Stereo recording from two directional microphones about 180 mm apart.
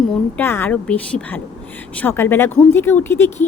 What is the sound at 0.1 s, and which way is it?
A woman's voice, 10° left (ahead or behind).